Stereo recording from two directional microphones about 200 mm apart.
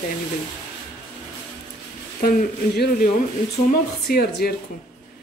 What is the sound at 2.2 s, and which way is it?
Speech, 50° left (ahead or behind).